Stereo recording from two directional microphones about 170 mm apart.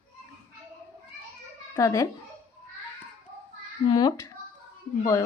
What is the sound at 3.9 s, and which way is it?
Speech, 25° left (ahead or behind).